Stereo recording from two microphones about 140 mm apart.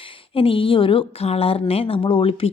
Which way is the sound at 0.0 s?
40° left (ahead or behind).